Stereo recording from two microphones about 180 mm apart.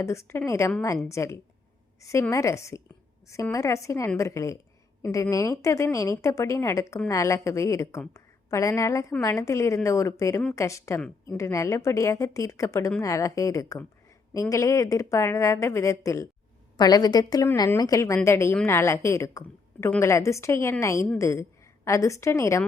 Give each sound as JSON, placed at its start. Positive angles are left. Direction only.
{"t": 0.0, "sound": "a woman's voice", "side_deg": 15}